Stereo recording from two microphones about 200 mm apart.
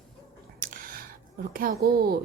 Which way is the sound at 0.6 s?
45° right (ahead or behind).